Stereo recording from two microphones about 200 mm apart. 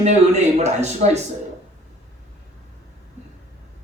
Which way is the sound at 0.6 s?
35° right (ahead or behind).